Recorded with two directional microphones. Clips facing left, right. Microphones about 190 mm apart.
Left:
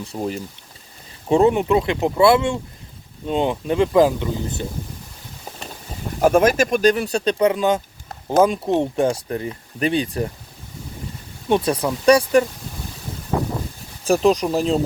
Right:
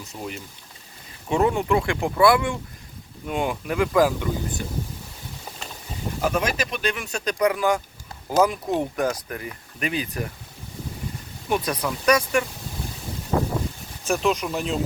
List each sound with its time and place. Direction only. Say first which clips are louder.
0.0 s speech: left 8 dB; 35° left (ahead or behind)
6.2 s speech: left 10 dB; 50° left (ahead or behind); by 10.3 s 30° left (ahead or behind)
11.4 s speech: left 6 dB; 25° left (ahead or behind)
14.0 s speech: left 6 dB; 35° left (ahead or behind)